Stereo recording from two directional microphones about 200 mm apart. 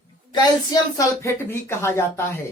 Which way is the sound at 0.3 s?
20° left (ahead or behind).